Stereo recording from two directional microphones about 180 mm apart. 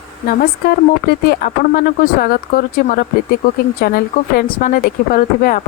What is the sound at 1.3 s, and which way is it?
Speech, 50° left (ahead or behind).